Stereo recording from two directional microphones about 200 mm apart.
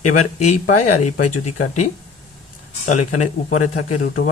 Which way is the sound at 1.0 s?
40° left (ahead or behind).